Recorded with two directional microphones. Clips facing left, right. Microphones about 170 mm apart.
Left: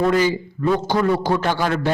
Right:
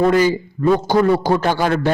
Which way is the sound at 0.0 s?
45° right (ahead or behind).